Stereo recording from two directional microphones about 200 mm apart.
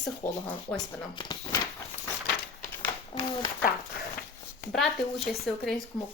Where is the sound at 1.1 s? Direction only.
20° left (ahead or behind).